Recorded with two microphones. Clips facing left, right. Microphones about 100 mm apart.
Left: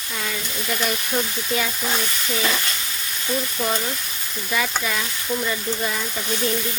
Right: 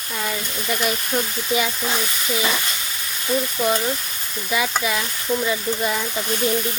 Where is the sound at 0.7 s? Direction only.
5° right (ahead or behind).